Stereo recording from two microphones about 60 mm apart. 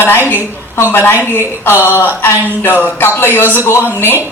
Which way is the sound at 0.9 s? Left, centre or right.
Left.